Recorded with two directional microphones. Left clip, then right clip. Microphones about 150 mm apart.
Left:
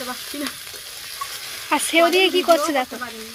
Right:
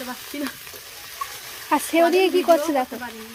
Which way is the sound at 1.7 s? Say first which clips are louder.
Left 1 dB; 15° right (ahead or behind).